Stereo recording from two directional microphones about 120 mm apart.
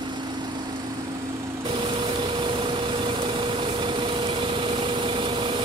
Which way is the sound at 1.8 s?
45° right (ahead or behind).